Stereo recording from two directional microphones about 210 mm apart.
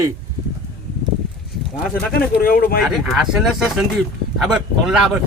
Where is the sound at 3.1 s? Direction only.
Centre (ahead or behind).